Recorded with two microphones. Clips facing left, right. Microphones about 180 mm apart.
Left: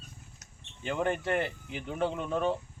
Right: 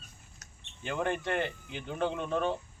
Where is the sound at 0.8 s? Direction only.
Centre (ahead or behind).